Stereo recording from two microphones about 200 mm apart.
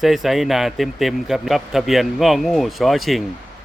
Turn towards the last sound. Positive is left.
turn(degrees=0)  # may be behind; listen again after turning